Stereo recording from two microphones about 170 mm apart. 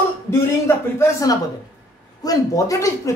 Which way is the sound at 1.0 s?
20° left (ahead or behind).